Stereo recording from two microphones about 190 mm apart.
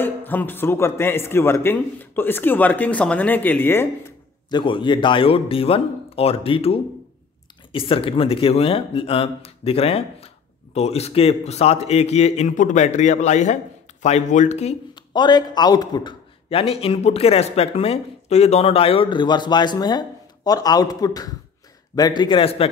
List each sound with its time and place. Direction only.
0.0 s a man's voice: 10° left (ahead or behind)
4.5 s speech: 25° left (ahead or behind)